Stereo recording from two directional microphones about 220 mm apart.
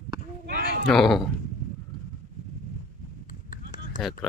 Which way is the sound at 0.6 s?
40° left (ahead or behind).